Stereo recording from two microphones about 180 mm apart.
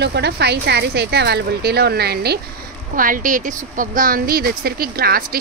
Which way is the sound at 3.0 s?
50° right (ahead or behind).